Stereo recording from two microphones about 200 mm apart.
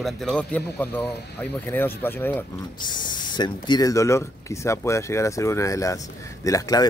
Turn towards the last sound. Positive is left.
turn(degrees=15)  # may be behind; listen again after turning